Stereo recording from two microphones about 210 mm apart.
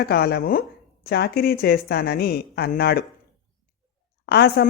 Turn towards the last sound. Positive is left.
turn(degrees=50)  # may be behind; listen again after turning